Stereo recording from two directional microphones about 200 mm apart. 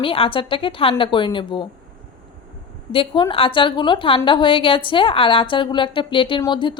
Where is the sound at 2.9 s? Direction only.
25° left (ahead or behind).